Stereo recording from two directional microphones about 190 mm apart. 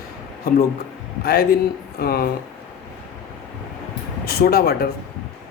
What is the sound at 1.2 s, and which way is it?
Speech, 55° left (ahead or behind).